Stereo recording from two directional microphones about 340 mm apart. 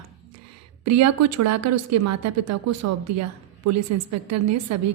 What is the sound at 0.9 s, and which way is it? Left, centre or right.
A woman's voice, right.